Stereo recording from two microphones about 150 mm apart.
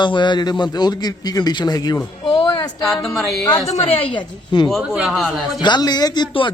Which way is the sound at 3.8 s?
40° left (ahead or behind).